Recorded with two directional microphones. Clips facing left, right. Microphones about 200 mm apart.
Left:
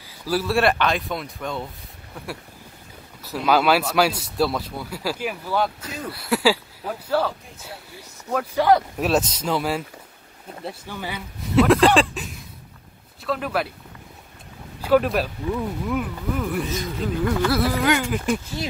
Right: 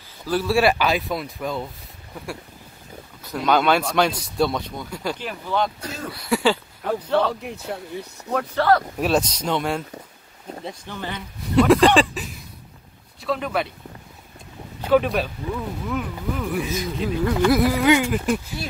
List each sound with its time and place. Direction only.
0.2 s speech: 5° left (ahead or behind)
3.3 s speech: 5° left (ahead or behind)
7.4 s speech: 65° right (ahead or behind)
8.3 s speech: 10° left (ahead or behind)
9.0 s speech: 5° left (ahead or behind)
14.9 s speech: centre (ahead or behind)
17.5 s a sound: 15° right (ahead or behind)